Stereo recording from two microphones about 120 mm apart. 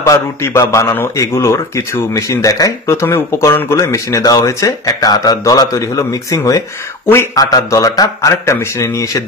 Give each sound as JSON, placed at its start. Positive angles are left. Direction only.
{"t": 0.0, "sound": "a man's voice", "side_deg": 25}